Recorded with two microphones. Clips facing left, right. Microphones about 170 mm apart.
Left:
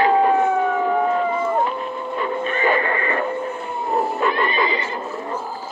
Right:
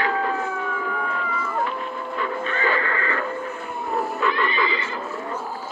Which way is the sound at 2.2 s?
20° left (ahead or behind).